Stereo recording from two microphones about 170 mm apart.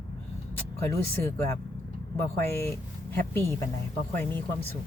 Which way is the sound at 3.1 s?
15° left (ahead or behind).